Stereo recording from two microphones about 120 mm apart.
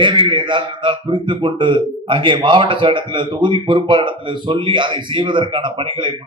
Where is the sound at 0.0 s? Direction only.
40° right (ahead or behind).